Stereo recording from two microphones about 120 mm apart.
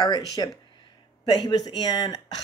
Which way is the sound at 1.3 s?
35° left (ahead or behind).